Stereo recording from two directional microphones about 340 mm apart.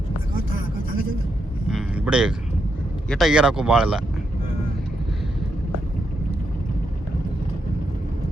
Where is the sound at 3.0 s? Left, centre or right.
Centre.